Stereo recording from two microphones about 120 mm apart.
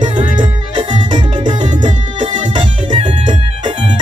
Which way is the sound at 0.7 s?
40° right (ahead or behind).